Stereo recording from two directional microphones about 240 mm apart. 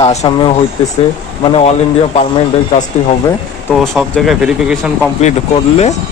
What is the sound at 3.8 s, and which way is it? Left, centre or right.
Speech, centre.